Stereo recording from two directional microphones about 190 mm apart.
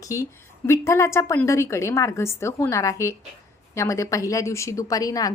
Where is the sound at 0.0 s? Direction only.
15° left (ahead or behind).